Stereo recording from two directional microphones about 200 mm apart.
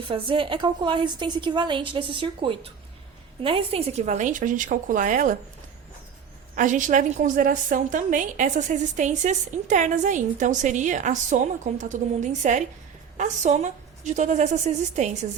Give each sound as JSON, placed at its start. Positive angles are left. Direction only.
{"t": 0.0, "sound": "a woman's voice", "side_deg": -25}
{"t": 6.6, "sound": "a woman's voice", "side_deg": -40}